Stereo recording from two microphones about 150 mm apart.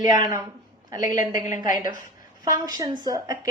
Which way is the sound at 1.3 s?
25° right (ahead or behind).